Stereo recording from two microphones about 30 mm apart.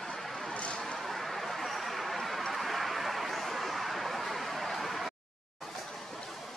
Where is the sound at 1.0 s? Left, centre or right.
Centre.